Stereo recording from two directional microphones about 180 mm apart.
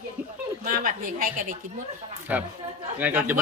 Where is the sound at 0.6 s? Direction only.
50° right (ahead or behind).